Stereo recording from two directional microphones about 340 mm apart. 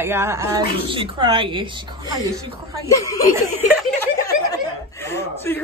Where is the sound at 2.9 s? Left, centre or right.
Centre.